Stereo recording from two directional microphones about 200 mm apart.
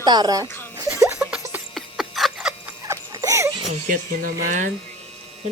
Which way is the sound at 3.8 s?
50° right (ahead or behind).